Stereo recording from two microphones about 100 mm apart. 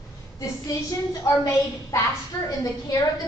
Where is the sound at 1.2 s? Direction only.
35° left (ahead or behind).